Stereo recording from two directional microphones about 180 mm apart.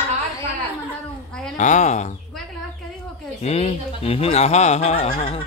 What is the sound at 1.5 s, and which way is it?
Speech, 40° left (ahead or behind).